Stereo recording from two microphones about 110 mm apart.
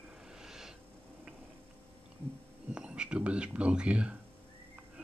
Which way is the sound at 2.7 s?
5° right (ahead or behind).